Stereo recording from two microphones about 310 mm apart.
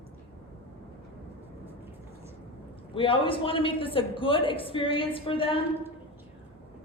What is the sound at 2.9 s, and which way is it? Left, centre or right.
A man's voice, centre.